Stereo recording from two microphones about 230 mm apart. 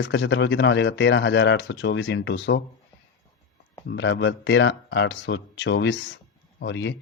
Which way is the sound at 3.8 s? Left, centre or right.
Left.